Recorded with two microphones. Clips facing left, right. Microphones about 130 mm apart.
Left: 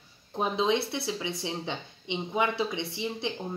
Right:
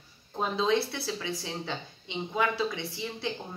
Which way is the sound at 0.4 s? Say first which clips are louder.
Even; 15° left (ahead or behind).